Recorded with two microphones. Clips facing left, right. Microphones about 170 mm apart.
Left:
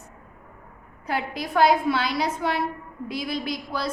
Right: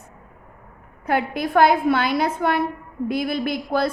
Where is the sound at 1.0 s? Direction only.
55° right (ahead or behind).